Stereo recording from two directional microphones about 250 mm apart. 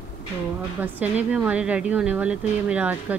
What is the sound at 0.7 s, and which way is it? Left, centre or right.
Speech, centre.